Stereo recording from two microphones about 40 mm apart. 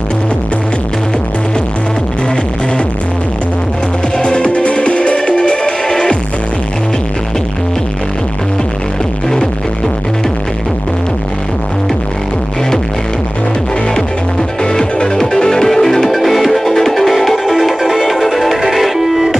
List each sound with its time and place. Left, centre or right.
4.2 s music: left
14.6 s music: left; by 19.3 s centre